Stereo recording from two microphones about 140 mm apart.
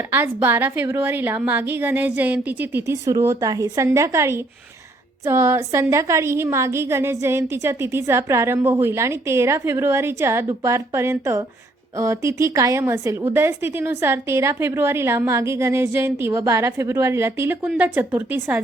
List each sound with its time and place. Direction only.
0.4 s a woman's voice: 15° right (ahead or behind)